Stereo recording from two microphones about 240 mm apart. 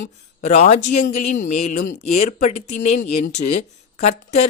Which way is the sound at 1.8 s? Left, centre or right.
Left.